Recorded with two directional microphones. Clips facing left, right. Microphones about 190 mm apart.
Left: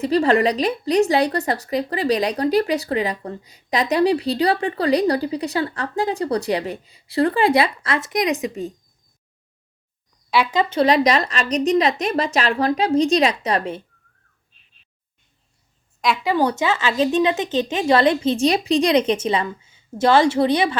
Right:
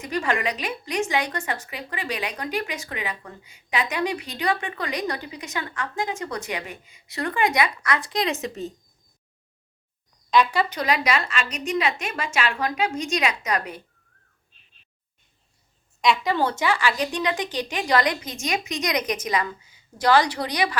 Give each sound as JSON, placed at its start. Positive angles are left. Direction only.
{"t": 0.0, "sound": "a woman's voice", "side_deg": 35}
{"t": 10.3, "sound": "a woman's voice", "side_deg": 15}
{"t": 16.2, "sound": "speech", "side_deg": 15}